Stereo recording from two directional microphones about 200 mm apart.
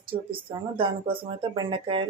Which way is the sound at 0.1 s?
25° right (ahead or behind).